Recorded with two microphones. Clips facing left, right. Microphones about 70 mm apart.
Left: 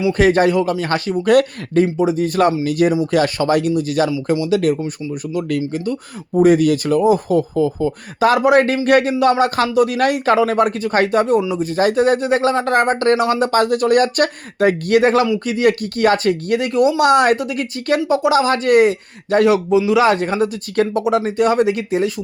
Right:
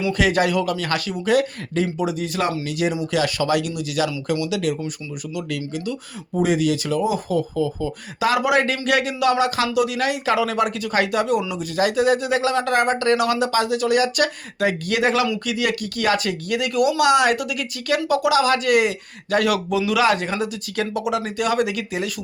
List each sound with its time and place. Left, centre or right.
0.1 s speech: left
1.2 s speech: left
10.3 s speech: left